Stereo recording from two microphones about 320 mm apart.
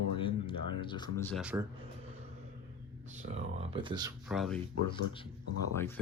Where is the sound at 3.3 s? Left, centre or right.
Centre.